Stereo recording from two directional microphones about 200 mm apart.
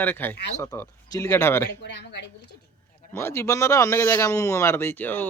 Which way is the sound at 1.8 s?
60° left (ahead or behind).